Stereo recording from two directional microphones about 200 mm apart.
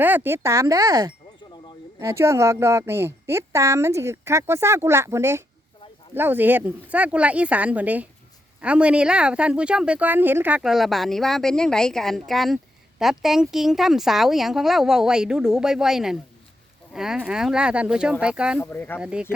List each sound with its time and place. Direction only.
0.0 s speech: 10° right (ahead or behind)
18.6 s speech: 10° left (ahead or behind)
18.9 s speech: 5° right (ahead or behind)